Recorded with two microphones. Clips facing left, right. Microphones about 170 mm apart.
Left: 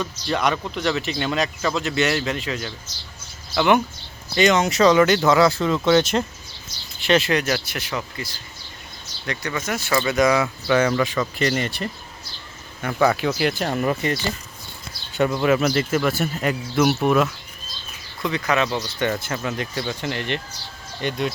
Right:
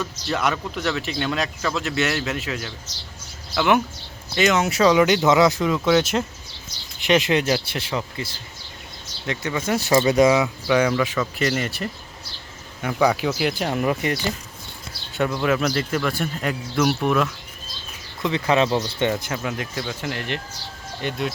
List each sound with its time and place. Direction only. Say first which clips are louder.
0.0 s speech: left 1 dB; 5° right (ahead or behind)
7.0 s speech: even; 20° right (ahead or behind)
9.6 s speech: right 5 dB; 30° right (ahead or behind); by 14.3 s 10° right (ahead or behind)
15.1 s speech: left 3 dB; centre (ahead or behind)
18.2 s speech: right 2 dB; 25° right (ahead or behind)
19.1 s speech: even; 10° right (ahead or behind)